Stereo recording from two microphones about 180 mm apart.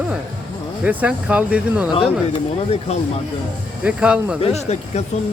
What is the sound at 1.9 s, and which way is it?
Speech, 30° left (ahead or behind).